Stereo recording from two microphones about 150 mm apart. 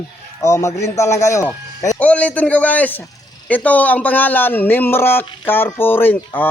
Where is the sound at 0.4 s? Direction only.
20° left (ahead or behind).